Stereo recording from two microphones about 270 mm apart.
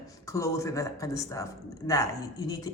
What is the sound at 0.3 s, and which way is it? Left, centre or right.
Speech, centre.